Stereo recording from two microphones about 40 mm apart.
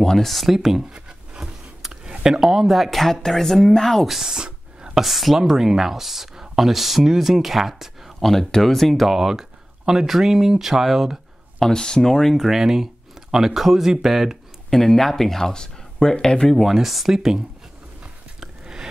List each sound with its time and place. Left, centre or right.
0.0 s speech: centre
0.3 s speech: centre
0.9 s a sound: right
2.4 s speech: centre
4.1 s speech: centre
4.4 s whispering: centre
5.0 s speech: centre
8.2 s speech: centre
9.1 s speech: centre
11.7 s speech: centre
12.4 s speech: centre
14.7 s speech: centre
16.5 s speech: centre
18.4 s a sound: centre